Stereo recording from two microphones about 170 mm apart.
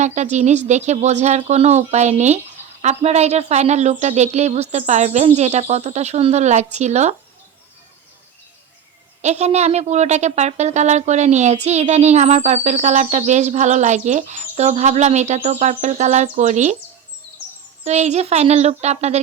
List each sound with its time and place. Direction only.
0.0 s a woman's voice: 45° right (ahead or behind)
9.2 s a woman's voice: 40° right (ahead or behind)
17.8 s speech: 40° right (ahead or behind)